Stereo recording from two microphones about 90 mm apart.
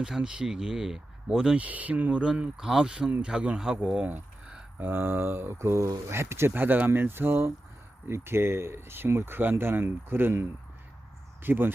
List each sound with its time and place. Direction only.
0.0 s speech: 10° right (ahead or behind)
4.0 s a sound: 15° right (ahead or behind)
4.9 s speech: 25° right (ahead or behind)
11.4 s speech: 25° right (ahead or behind)